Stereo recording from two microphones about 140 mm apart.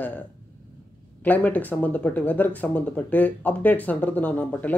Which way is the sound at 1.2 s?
10° left (ahead or behind).